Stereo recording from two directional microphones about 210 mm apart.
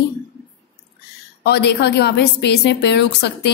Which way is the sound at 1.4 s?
55° left (ahead or behind).